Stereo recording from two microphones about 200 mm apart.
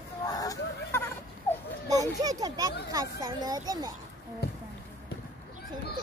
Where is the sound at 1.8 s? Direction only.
20° right (ahead or behind).